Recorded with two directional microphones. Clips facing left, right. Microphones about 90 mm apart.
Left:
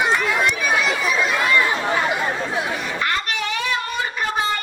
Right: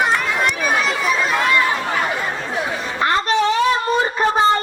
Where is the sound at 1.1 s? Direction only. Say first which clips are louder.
Right 2 dB; centre (ahead or behind).